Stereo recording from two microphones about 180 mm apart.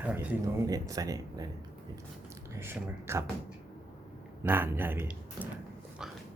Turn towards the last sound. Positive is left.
turn(degrees=-10)  # may be behind; listen again after turning